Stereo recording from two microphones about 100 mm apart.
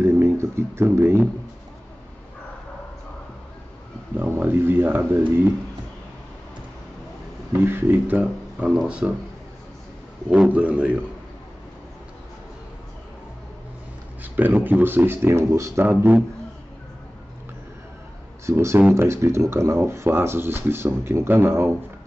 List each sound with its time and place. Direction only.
0.0 s speech: 25° right (ahead or behind)
4.2 s speech: 20° right (ahead or behind)
7.6 s speech: 20° right (ahead or behind)
10.3 s speech: 10° right (ahead or behind)
14.2 s speech: 15° right (ahead or behind)
18.4 s speech: 25° right (ahead or behind)
18.8 s speech: 15° right (ahead or behind)
19.0 s speech: 25° right (ahead or behind)